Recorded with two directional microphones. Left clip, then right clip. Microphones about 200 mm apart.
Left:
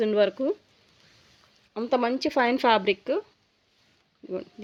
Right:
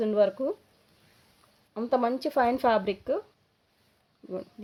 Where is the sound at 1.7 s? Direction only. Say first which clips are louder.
Left 1 dB; 35° left (ahead or behind).